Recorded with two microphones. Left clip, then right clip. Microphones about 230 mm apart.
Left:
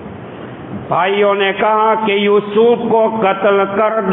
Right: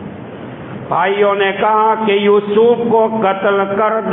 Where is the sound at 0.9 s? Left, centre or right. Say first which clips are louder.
Even; left.